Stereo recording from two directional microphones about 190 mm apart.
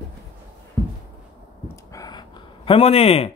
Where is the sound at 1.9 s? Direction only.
20° left (ahead or behind).